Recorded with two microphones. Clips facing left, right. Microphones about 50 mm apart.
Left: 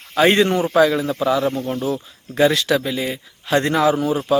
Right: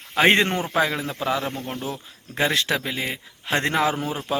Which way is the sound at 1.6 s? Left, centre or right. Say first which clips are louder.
Left 8 dB; centre.